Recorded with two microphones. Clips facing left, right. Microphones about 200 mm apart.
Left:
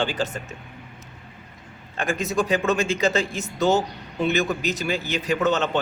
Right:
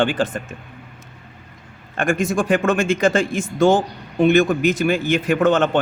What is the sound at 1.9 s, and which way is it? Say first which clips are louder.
Speech: right 4 dB; 50° right (ahead or behind).